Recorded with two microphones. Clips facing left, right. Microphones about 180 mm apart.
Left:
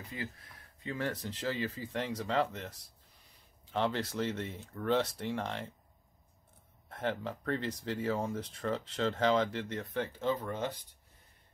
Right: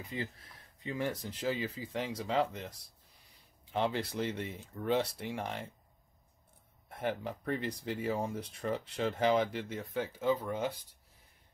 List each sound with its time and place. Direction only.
0.1 s speech: 20° right (ahead or behind)
6.9 s speech: 10° right (ahead or behind)